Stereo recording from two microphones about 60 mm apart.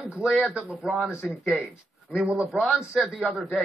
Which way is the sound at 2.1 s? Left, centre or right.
Centre.